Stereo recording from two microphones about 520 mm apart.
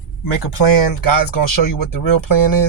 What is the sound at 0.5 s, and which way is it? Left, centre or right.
Speech, left.